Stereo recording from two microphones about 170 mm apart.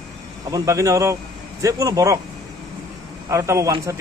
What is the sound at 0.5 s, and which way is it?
Speech, 20° right (ahead or behind).